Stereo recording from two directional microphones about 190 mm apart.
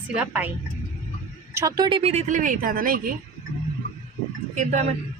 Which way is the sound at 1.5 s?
20° right (ahead or behind).